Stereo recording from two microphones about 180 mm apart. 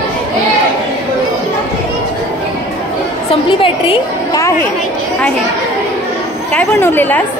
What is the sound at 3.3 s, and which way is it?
Speech, 30° left (ahead or behind).